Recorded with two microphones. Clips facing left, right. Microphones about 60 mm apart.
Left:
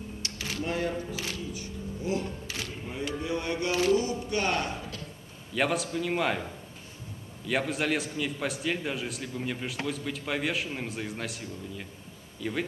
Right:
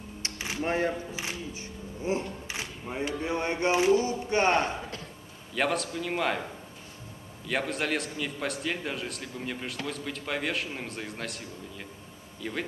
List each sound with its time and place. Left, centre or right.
0.2 s a sound: right
3.2 s speech: right
5.5 s a man's voice: centre
7.4 s a man's voice: centre